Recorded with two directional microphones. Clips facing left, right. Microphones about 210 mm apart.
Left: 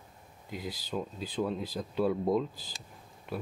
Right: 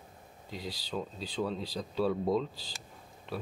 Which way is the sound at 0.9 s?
10° left (ahead or behind).